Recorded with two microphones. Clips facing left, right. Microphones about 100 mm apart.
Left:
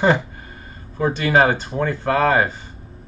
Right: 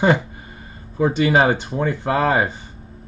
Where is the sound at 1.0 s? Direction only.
20° right (ahead or behind).